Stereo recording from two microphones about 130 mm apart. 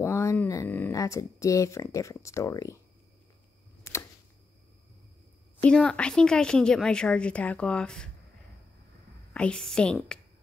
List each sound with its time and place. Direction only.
0.0 s a sound: 20° left (ahead or behind)
0.9 s speech: 25° left (ahead or behind)
3.9 s camera: 20° left (ahead or behind)
5.6 s a woman's voice: 5° left (ahead or behind)
9.3 s a woman's voice: 5° left (ahead or behind)